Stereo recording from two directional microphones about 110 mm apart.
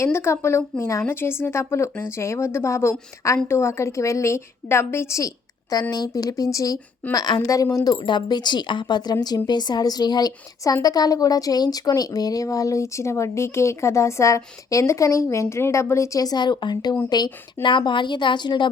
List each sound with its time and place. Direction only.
0.0 s a woman's voice: 25° left (ahead or behind); by 18.7 s 45° left (ahead or behind)